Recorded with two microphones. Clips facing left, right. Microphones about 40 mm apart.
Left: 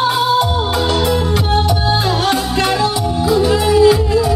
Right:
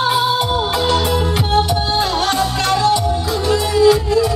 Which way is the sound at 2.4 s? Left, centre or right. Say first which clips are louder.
Even; centre.